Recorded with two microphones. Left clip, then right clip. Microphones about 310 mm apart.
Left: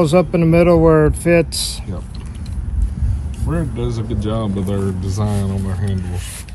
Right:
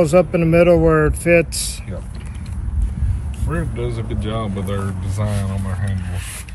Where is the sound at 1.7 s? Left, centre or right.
Centre.